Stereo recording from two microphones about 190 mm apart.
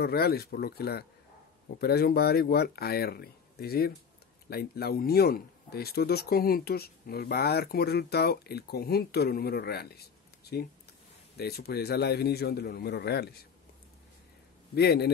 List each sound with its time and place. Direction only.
0.0 s speech: 55° left (ahead or behind)
14.8 s speech: 60° left (ahead or behind)